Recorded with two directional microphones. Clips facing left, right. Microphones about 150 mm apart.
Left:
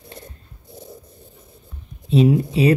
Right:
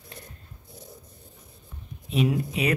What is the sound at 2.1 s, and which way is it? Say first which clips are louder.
Speech: left 9 dB; 30° left (ahead or behind).